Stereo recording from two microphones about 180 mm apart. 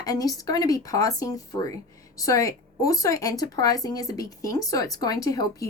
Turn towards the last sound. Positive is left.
turn(degrees=20)  # may be behind; listen again after turning